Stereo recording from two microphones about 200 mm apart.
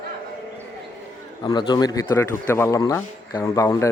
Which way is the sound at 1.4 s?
20° left (ahead or behind).